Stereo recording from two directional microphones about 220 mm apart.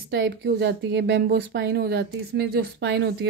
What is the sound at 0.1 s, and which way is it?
A woman's voice, 50° right (ahead or behind).